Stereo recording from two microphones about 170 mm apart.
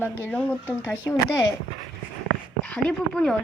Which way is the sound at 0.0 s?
10° left (ahead or behind).